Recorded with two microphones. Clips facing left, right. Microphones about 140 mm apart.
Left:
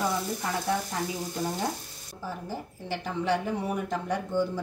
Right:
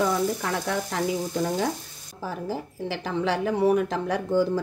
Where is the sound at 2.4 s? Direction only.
90° right.